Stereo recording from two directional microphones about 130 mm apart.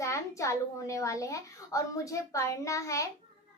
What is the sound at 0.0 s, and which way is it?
A child's voice, 25° left (ahead or behind).